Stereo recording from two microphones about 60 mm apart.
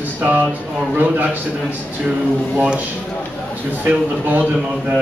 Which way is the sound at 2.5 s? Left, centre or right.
Centre.